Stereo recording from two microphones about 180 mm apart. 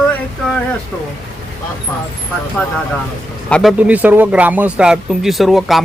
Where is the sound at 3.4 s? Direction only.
5° left (ahead or behind).